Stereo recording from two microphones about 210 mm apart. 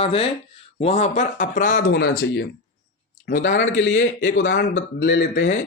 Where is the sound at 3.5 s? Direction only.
65° left (ahead or behind).